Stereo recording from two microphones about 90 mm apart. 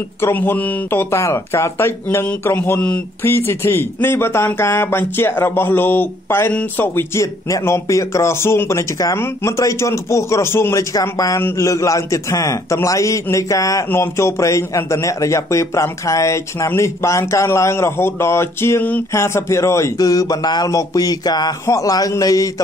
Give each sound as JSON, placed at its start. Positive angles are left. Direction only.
{"t": 0.2, "sound": "speech", "side_deg": 25}
{"t": 7.2, "sound": "a man's voice", "side_deg": 35}
{"t": 19.1, "sound": "a man's voice", "side_deg": 30}
{"t": 20.0, "sound": "a man's voice", "side_deg": 45}